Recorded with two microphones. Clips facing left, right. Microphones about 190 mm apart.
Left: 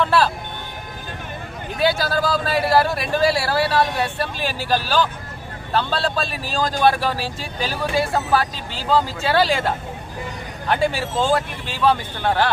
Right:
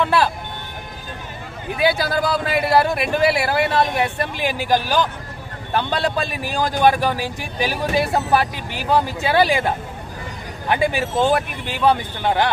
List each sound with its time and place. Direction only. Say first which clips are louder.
0.0 s a man's voice: even; 15° right (ahead or behind)
1.8 s a man's voice: right 1 dB; 15° right (ahead or behind)